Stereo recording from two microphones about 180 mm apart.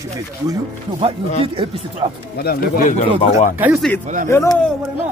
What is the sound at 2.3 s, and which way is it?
Speech, 55° left (ahead or behind).